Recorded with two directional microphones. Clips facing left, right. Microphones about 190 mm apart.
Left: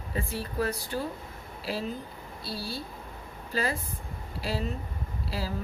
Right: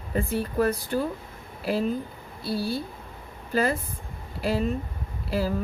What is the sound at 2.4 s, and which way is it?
Speech, 55° right (ahead or behind).